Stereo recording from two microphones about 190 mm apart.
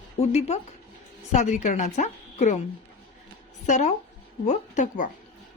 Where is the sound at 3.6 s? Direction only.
40° left (ahead or behind).